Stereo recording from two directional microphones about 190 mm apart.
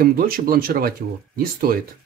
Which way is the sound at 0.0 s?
50° right (ahead or behind).